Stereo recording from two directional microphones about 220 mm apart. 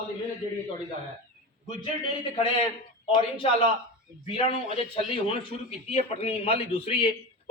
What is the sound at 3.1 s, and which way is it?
A man's voice, 25° left (ahead or behind).